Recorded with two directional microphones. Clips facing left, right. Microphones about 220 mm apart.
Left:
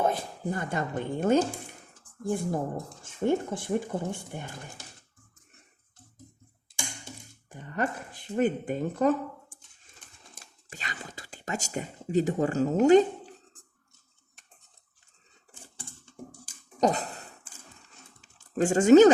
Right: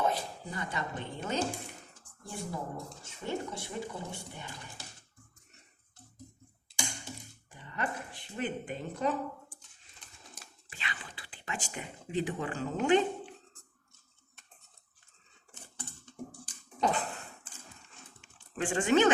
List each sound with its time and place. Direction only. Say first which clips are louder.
0.0 s speech: left 4 dB; 50° left (ahead or behind)
7.5 s speech: left 6 dB; 45° left (ahead or behind)
10.3 s whispering: left 8 dB; 40° left (ahead or behind)
16.8 s a sound: left 6 dB; 40° left (ahead or behind)
17.8 s crumpling: even; 40° left (ahead or behind)